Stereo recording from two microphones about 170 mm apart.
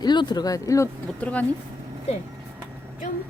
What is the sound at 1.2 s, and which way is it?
Speech, 10° left (ahead or behind).